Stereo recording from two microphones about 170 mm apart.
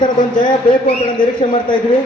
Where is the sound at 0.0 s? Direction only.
25° left (ahead or behind).